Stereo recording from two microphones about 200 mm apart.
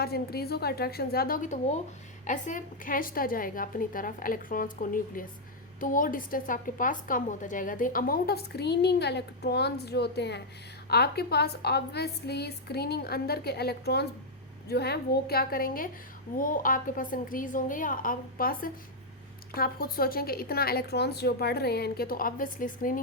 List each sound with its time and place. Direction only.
0.0 s a woman's voice: 50° left (ahead or behind)